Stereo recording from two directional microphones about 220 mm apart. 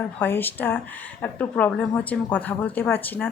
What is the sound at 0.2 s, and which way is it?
Speech, 10° left (ahead or behind).